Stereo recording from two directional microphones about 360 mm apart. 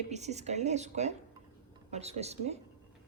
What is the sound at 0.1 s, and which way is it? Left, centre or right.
A woman's voice, centre.